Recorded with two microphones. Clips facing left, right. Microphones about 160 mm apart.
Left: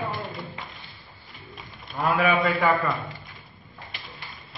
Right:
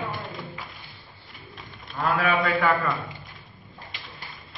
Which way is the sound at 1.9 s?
10° left (ahead or behind).